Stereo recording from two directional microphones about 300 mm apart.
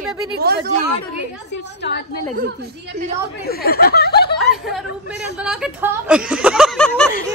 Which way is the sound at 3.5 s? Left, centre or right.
Left.